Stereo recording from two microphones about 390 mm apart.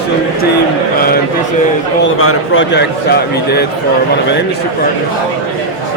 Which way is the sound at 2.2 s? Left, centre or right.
Left.